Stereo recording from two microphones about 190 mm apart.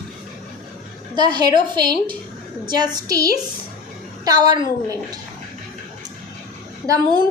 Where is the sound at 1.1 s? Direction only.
25° right (ahead or behind).